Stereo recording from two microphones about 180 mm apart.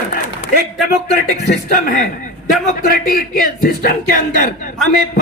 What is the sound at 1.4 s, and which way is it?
Speech, 45° left (ahead or behind).